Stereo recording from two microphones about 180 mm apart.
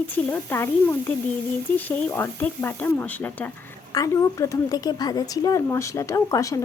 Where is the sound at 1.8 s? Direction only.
10° left (ahead or behind).